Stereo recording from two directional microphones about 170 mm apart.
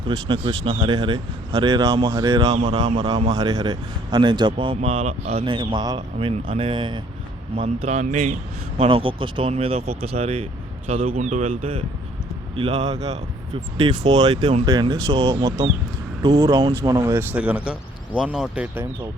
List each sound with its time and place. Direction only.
0.1 s speech: 25° right (ahead or behind); by 18.9 s 5° right (ahead or behind)